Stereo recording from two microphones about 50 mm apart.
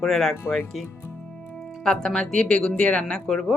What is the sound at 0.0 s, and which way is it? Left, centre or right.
Speech, centre.